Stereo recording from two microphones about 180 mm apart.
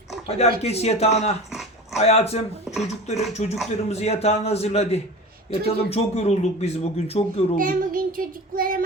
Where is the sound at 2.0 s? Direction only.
35° left (ahead or behind).